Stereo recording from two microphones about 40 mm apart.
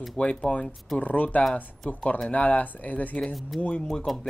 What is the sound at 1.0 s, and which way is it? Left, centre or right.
Speech, left.